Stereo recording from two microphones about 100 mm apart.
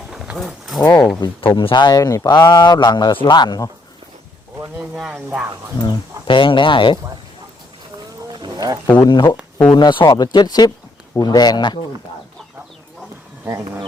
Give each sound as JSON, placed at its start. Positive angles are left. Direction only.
{"t": 0.1, "sound": "a sound", "side_deg": -5}
{"t": 0.8, "sound": "speech", "side_deg": 30}
{"t": 1.5, "sound": "speech", "side_deg": 50}
{"t": 4.9, "sound": "speech", "side_deg": -5}
{"t": 6.2, "sound": "speech", "side_deg": 60}
{"t": 8.3, "sound": "wild animals", "side_deg": -45}
{"t": 9.0, "sound": "speech", "side_deg": 50}